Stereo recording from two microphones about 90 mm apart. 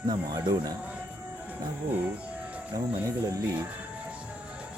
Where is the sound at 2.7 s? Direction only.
40° right (ahead or behind).